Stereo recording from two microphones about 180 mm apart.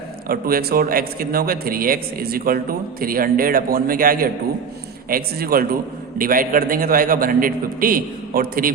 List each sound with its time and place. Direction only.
0.3 s a man's voice: 55° right (ahead or behind)